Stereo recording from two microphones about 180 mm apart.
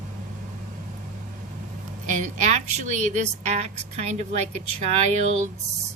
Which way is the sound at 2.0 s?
40° right (ahead or behind).